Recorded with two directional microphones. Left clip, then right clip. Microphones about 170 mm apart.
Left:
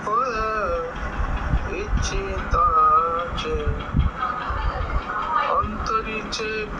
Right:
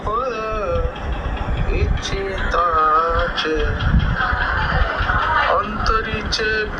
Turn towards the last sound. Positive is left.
turn(degrees=-25)  # may be behind; listen again after turning